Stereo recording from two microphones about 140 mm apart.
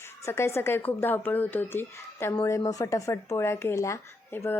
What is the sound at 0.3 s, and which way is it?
A woman's voice, 20° left (ahead or behind).